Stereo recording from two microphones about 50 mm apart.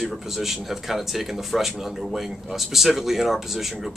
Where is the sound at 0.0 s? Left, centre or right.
Centre.